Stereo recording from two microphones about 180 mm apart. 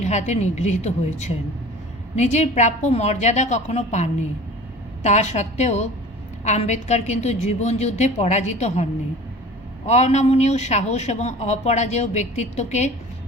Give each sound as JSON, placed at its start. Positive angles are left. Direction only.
{"t": 0.0, "sound": "speech", "side_deg": 40}